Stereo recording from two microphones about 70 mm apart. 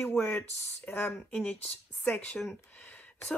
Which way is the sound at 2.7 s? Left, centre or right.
Left.